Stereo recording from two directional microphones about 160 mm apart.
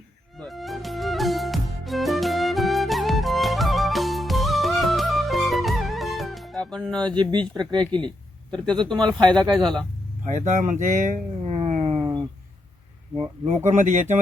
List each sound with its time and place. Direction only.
0.3 s music: centre (ahead or behind)
7.3 s speech: 25° right (ahead or behind)
8.4 s speech: 5° left (ahead or behind)
9.1 s speech: 30° right (ahead or behind)
10.2 s speech: 50° right (ahead or behind)
11.5 s a sound: 40° right (ahead or behind)
13.7 s speech: 50° right (ahead or behind)